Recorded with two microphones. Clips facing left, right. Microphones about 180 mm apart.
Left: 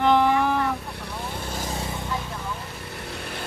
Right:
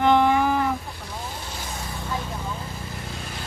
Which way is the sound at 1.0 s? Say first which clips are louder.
Left 2 dB; 60° left (ahead or behind).